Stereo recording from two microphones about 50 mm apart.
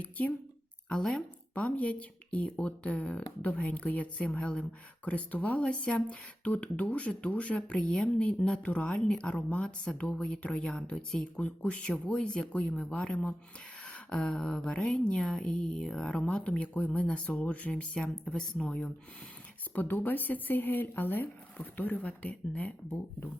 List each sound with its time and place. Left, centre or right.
0.0 s speech: left
0.9 s speech: centre
1.5 s speech: left
10.8 s speech: centre
11.3 s speech: left
13.8 s a sound: left
14.7 s speech: centre
16.2 s speech: left
19.7 s speech: left